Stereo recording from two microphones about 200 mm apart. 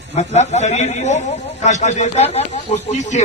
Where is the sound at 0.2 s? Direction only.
35° left (ahead or behind).